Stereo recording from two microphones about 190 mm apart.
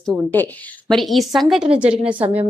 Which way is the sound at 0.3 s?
10° left (ahead or behind).